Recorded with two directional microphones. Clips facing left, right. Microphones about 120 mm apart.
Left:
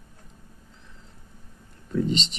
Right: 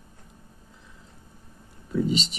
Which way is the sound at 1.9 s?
5° right (ahead or behind).